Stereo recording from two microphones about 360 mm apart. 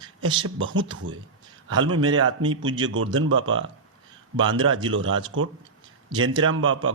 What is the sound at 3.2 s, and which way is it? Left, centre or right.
Speech, right.